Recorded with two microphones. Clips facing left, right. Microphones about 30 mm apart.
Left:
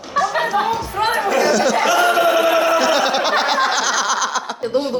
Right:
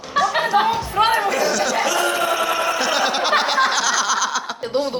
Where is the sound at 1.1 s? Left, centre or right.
Centre.